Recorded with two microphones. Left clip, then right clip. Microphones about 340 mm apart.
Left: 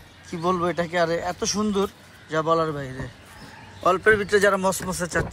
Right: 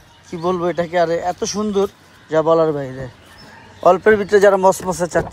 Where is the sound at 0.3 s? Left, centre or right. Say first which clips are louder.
Right 4 dB; centre.